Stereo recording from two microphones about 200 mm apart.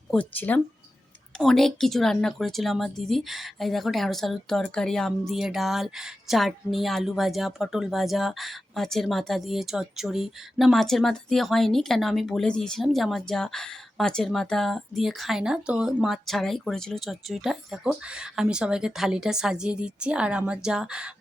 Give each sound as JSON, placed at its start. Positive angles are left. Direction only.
{"t": 0.1, "sound": "a woman's voice", "side_deg": 5}